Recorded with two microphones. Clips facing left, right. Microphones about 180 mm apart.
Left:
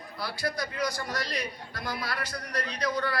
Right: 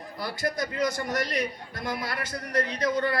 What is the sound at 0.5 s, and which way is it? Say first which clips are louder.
Speech: right 4 dB; 20° right (ahead or behind).